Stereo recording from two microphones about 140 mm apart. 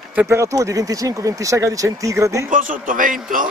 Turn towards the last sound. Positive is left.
turn(degrees=-70)  # may be behind; listen again after turning